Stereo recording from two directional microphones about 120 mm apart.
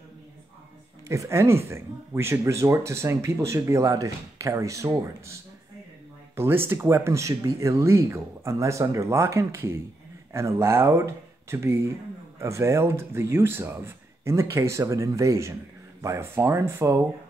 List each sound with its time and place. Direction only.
1.0 s speech: 25° right (ahead or behind)